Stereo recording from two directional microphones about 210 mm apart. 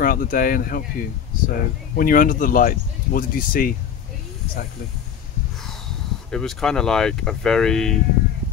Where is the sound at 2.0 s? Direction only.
40° left (ahead or behind).